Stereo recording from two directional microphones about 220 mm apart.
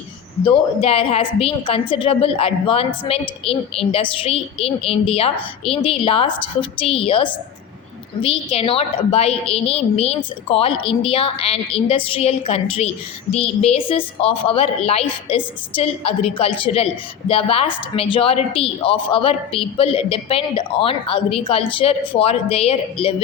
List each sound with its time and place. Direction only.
0.4 s a woman's voice: 25° left (ahead or behind)